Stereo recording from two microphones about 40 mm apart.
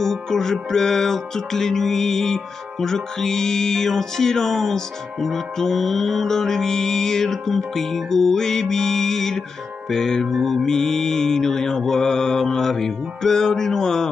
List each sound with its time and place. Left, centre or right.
0.0 s music: centre